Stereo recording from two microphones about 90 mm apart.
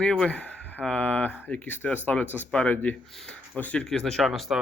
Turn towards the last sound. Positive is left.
turn(degrees=0)  # may be behind; listen again after turning